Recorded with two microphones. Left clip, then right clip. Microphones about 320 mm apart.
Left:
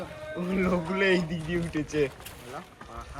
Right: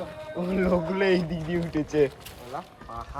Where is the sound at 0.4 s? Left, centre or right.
Right.